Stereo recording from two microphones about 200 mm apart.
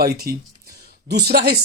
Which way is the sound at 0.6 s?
50° right (ahead or behind).